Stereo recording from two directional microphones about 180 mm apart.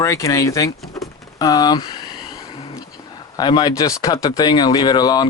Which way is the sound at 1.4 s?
20° left (ahead or behind).